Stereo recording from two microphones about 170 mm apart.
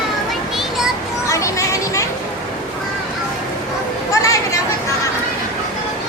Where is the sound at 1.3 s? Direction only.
20° left (ahead or behind).